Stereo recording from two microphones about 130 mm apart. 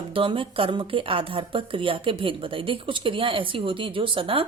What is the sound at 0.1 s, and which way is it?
A woman's voice, 40° right (ahead or behind).